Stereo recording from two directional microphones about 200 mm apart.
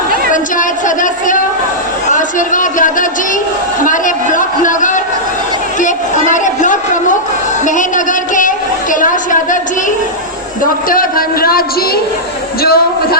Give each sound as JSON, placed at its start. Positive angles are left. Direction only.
{"t": 0.9, "sound": "child singing", "side_deg": 40}
{"t": 2.0, "sound": "a sound", "side_deg": 40}
{"t": 10.6, "sound": "a man's voice", "side_deg": 45}
{"t": 12.6, "sound": "a man's voice", "side_deg": 50}